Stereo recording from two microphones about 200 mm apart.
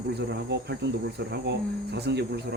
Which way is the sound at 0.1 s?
55° right (ahead or behind).